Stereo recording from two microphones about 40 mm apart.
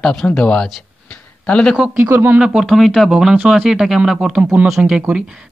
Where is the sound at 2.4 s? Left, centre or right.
Right.